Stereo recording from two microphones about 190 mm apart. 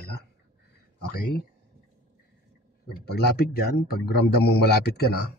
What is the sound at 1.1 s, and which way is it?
Speech, 50° left (ahead or behind).